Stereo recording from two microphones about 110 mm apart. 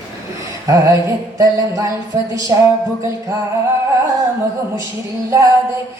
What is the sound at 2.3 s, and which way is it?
Speech, 30° right (ahead or behind).